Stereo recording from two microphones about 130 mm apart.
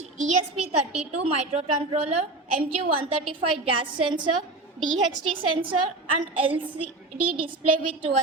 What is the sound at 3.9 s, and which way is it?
Speech, 35° right (ahead or behind).